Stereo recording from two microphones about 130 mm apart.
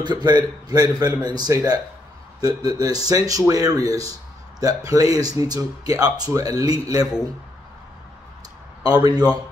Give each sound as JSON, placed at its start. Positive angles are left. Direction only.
{"t": 0.0, "sound": "speech", "side_deg": -35}
{"t": 8.8, "sound": "speech", "side_deg": -30}